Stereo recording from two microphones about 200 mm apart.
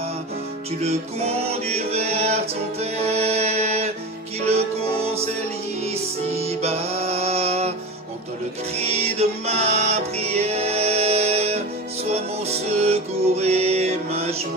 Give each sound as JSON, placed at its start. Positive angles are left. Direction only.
{"t": 0.8, "sound": "music", "side_deg": -30}
{"t": 5.8, "sound": "music", "side_deg": -30}
{"t": 8.8, "sound": "music", "side_deg": -30}